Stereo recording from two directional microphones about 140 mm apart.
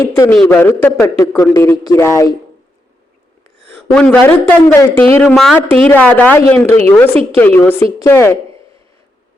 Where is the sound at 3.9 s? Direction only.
5° left (ahead or behind).